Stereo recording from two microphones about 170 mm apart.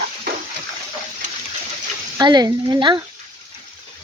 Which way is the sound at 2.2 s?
25° right (ahead or behind).